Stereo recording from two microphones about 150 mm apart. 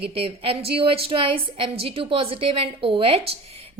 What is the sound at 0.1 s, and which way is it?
A woman's voice, 40° right (ahead or behind).